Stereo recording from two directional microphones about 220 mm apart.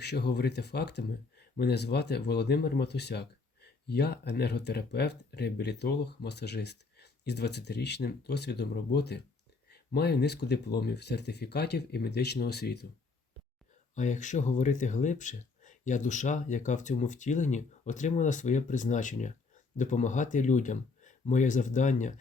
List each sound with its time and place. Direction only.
0.0 s speech: 50° left (ahead or behind)
13.9 s speech: 35° left (ahead or behind)